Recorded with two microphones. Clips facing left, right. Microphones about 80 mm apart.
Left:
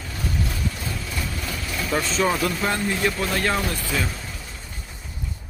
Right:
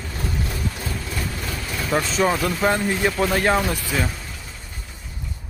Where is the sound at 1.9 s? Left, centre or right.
Centre.